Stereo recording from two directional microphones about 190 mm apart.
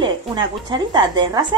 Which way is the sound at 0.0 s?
25° right (ahead or behind).